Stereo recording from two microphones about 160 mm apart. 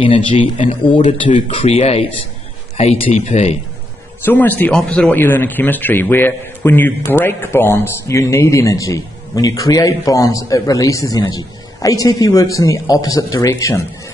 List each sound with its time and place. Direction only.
0.0 s speech: 35° left (ahead or behind)
4.2 s speech: 10° left (ahead or behind)